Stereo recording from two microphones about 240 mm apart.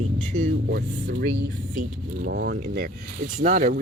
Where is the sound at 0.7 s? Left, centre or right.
Right.